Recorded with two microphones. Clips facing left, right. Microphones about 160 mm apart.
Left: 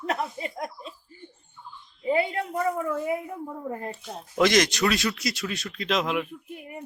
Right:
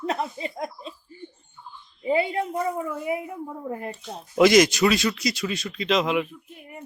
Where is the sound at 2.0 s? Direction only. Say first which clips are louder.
Right 2 dB; 25° right (ahead or behind).